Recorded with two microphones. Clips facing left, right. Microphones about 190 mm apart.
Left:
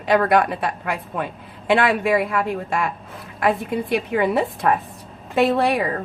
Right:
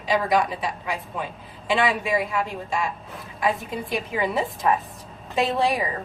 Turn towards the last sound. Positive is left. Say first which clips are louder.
# left 4 dB
turn(degrees=65)  # may be behind; listen again after turning